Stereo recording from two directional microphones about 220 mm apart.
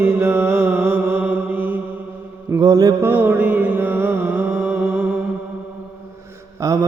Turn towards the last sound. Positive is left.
turn(degrees=-15)  # may be behind; listen again after turning